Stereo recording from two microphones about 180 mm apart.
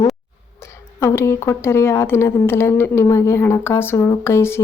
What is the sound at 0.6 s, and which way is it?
A woman's voice, 15° left (ahead or behind).